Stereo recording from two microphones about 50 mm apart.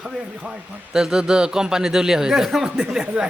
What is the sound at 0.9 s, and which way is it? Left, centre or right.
Speech, centre.